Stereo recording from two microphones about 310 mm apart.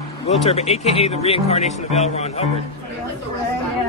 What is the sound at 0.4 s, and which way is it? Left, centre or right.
Speech, centre.